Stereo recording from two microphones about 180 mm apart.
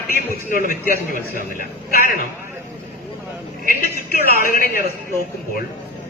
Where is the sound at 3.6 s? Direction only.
55° left (ahead or behind).